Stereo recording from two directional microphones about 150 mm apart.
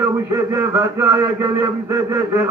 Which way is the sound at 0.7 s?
15° right (ahead or behind).